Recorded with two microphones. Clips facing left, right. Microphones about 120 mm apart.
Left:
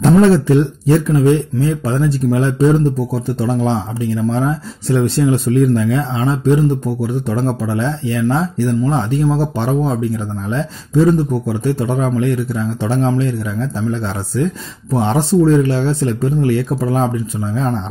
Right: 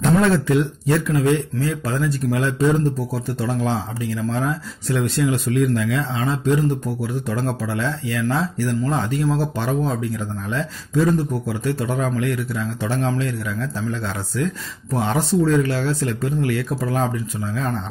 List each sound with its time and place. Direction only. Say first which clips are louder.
0.0 s speech: left 7 dB; 30° left (ahead or behind)